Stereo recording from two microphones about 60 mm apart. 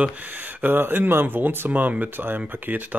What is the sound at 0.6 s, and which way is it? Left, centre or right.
Speech, right.